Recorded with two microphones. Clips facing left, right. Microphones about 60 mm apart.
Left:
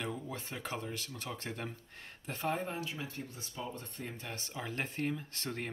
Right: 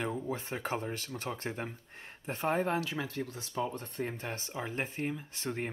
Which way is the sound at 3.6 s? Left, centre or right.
Right.